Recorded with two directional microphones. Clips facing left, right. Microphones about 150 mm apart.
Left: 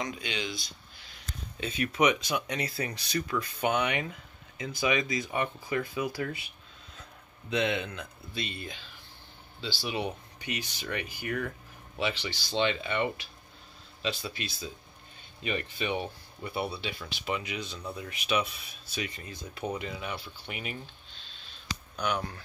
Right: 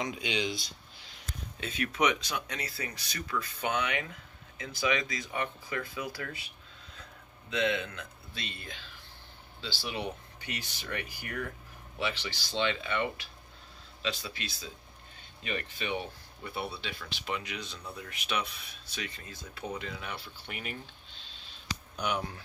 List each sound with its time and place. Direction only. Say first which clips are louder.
0.0 s speech: right 2 dB; 15° right (ahead or behind)
1.6 s speech: left 3 dB; centre (ahead or behind)
7.4 s speech: left 1 dB; 20° left (ahead or behind)
15.4 s speech: left 4 dB; 15° left (ahead or behind)
21.9 s speech: left 2 dB; 15° right (ahead or behind)